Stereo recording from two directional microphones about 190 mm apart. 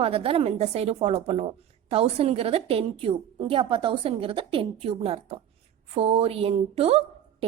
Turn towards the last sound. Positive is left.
turn(degrees=-30)  # may be behind; listen again after turning